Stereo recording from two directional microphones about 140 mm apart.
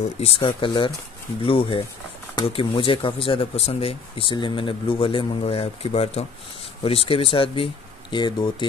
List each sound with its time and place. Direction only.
0.4 s speech: 35° left (ahead or behind)